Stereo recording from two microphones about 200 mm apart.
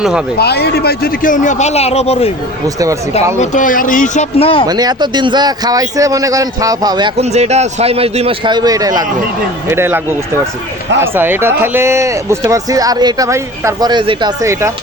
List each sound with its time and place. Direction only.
0.3 s speech: 55° left (ahead or behind); by 2.3 s 30° left (ahead or behind)
3.3 s speech: 40° left (ahead or behind)
4.6 s speech: 20° right (ahead or behind)
7.2 s speech: 35° right (ahead or behind); by 14.7 s 15° right (ahead or behind)